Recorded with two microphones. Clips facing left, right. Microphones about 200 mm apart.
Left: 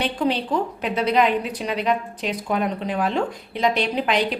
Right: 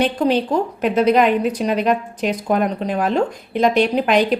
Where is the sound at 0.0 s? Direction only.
45° right (ahead or behind).